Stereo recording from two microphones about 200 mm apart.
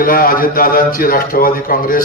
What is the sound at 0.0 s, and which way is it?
A man's voice, 45° left (ahead or behind).